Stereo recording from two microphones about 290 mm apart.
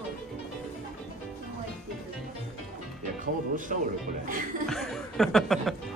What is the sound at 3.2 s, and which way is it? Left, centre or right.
Music, right.